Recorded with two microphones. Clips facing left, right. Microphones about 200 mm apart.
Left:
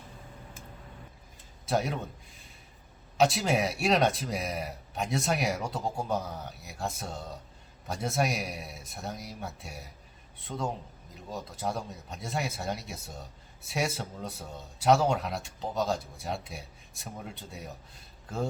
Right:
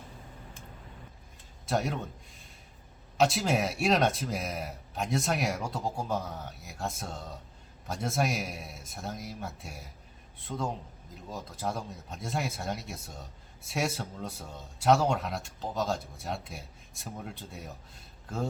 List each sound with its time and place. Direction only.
1.6 s a man's voice: centre (ahead or behind)